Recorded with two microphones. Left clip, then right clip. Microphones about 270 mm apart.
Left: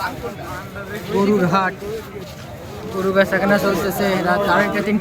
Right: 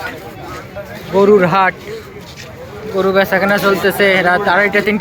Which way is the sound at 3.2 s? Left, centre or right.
Right.